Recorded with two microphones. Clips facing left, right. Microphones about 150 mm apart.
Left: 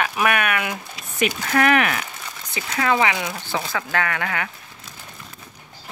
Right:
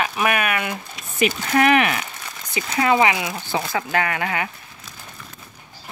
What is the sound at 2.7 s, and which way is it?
Speech, 20° right (ahead or behind).